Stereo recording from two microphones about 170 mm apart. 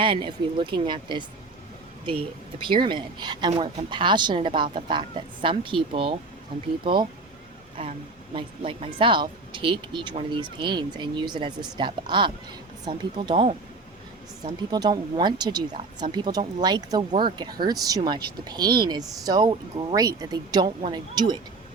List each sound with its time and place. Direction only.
0.0 s a woman's voice: 30° right (ahead or behind)
2.6 s a woman's voice: 30° right (ahead or behind)
14.7 s a woman's voice: 25° right (ahead or behind)